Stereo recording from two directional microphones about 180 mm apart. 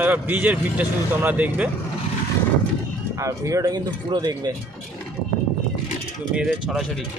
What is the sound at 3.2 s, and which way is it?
Speech, 15° right (ahead or behind).